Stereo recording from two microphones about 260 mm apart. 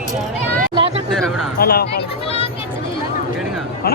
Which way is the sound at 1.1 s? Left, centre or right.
Centre.